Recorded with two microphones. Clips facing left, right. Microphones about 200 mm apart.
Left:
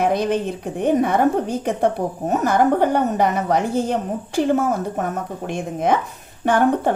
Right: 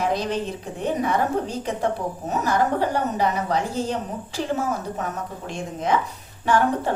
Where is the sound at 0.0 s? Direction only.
55° left (ahead or behind).